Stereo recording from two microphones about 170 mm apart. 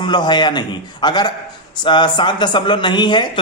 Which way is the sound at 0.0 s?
25° left (ahead or behind).